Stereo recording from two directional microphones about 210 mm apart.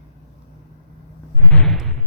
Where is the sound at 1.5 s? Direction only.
Centre (ahead or behind).